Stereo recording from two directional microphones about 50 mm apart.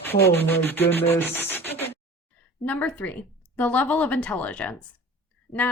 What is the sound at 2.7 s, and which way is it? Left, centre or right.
A woman's voice, left.